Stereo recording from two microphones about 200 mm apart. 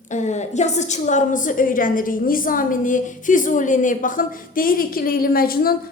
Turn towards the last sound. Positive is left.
turn(degrees=45)  # may be behind; listen again after turning